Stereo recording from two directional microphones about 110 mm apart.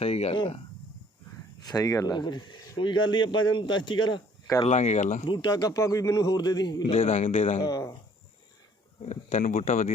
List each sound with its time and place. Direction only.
0.0 s speech: 75° left (ahead or behind)
0.3 s speech: 50° left (ahead or behind)
1.6 s speech: 35° left (ahead or behind)
4.6 s speech: 75° left (ahead or behind)
5.3 s a man's voice: 40° left (ahead or behind)
6.9 s speech: 80° left
7.6 s a man's voice: 30° left (ahead or behind)
9.0 s speech: 75° left (ahead or behind)